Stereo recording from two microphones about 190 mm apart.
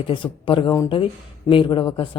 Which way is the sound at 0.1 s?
25° left (ahead or behind).